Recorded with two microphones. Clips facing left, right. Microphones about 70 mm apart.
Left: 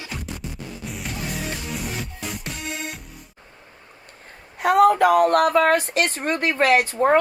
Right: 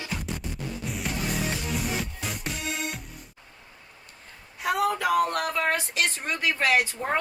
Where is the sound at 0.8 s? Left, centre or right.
Centre.